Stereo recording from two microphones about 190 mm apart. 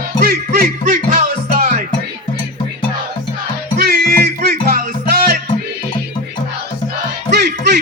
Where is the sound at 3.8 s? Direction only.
55° right (ahead or behind).